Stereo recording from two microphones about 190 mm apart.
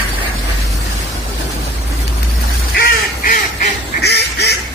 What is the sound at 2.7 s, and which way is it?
Duck, 45° left (ahead or behind).